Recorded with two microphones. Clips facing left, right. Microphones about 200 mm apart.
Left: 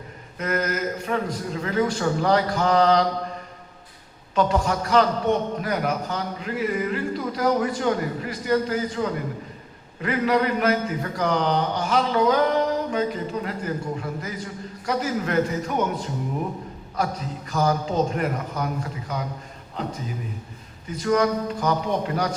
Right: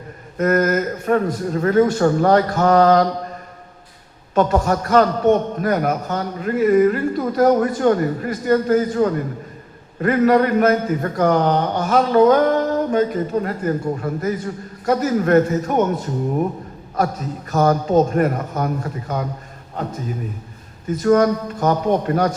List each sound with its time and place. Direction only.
0.3 s a man's voice: 45° right (ahead or behind)
4.4 s a man's voice: 45° right (ahead or behind)
17.5 s a man's voice: 50° right (ahead or behind)
20.8 s a man's voice: 45° right (ahead or behind)